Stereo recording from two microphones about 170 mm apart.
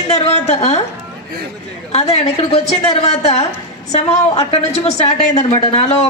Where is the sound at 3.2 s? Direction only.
40° left (ahead or behind).